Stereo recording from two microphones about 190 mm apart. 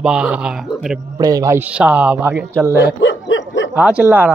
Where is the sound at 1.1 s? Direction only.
20° right (ahead or behind).